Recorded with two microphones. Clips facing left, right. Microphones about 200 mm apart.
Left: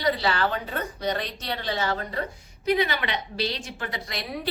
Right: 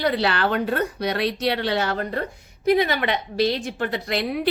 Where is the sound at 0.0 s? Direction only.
65° right (ahead or behind).